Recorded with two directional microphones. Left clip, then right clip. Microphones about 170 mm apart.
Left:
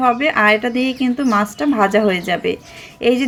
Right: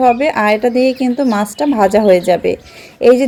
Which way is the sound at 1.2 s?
45° right (ahead or behind).